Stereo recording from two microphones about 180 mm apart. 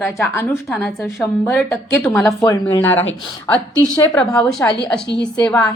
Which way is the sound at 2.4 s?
20° left (ahead or behind).